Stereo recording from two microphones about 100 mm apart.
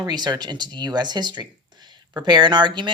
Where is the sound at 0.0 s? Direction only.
45° right (ahead or behind).